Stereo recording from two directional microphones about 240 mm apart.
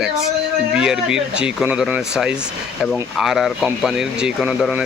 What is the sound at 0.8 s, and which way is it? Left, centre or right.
Speech, centre.